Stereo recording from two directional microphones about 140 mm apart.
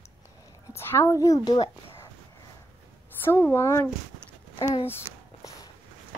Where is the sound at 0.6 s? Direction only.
20° left (ahead or behind).